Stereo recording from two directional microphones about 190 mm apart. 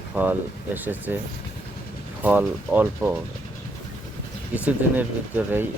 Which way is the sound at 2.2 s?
10° right (ahead or behind).